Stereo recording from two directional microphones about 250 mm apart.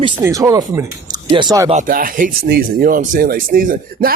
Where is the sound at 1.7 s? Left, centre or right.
Right.